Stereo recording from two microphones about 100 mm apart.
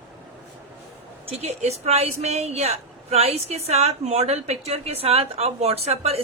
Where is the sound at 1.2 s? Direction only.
85° right.